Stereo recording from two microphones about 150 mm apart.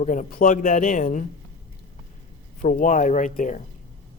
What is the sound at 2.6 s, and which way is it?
Speech, 65° left (ahead or behind).